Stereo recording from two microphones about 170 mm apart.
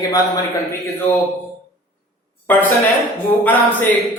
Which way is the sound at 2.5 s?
10° left (ahead or behind).